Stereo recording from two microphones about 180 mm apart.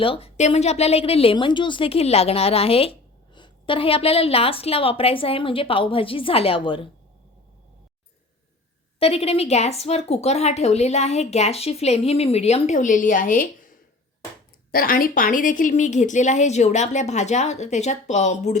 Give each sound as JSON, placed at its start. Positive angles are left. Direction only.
{"t": 0.0, "sound": "a woman's voice", "side_deg": 30}
{"t": 9.0, "sound": "a woman's voice", "side_deg": 35}